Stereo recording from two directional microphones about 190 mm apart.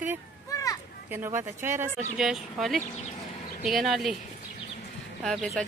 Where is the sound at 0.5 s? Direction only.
15° left (ahead or behind).